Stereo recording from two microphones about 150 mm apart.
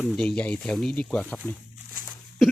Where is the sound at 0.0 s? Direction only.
Centre (ahead or behind).